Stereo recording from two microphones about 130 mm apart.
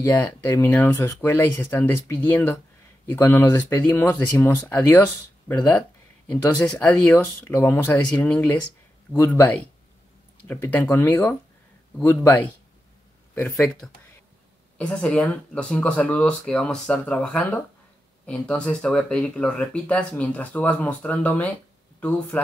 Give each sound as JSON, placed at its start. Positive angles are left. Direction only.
{"t": 0.0, "sound": "speech", "side_deg": 20}
{"t": 13.8, "sound": "speech", "side_deg": 5}